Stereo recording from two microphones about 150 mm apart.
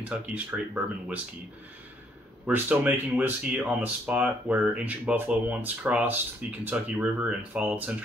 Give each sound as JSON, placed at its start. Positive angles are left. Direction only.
{"t": 0.0, "sound": "speech", "side_deg": -10}
{"t": 2.4, "sound": "speech", "side_deg": -10}